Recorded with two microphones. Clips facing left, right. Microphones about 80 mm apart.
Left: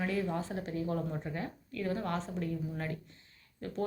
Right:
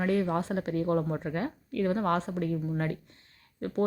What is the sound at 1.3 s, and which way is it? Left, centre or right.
A woman's voice, right.